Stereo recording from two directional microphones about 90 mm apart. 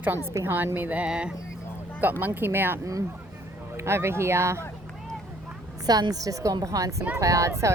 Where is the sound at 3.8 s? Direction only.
30° right (ahead or behind).